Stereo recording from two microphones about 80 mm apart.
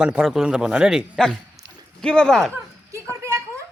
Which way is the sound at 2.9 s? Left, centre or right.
Right.